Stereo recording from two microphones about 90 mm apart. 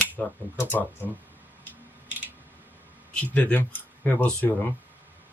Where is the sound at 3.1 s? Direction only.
15° left (ahead or behind).